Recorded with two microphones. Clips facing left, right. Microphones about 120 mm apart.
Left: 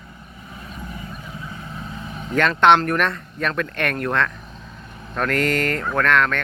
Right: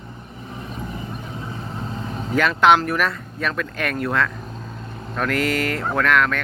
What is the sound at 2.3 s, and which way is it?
Speech, 5° right (ahead or behind).